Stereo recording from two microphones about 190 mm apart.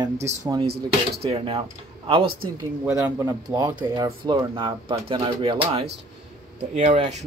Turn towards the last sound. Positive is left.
turn(degrees=-35)  # may be behind; listen again after turning